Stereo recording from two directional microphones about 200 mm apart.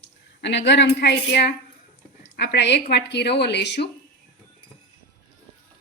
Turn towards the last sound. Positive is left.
turn(degrees=55)  # may be behind; listen again after turning